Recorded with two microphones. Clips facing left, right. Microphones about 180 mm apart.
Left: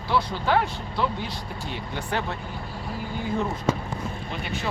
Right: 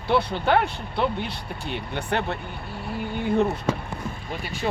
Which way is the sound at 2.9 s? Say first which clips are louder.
Right 5 dB; 65° right (ahead or behind).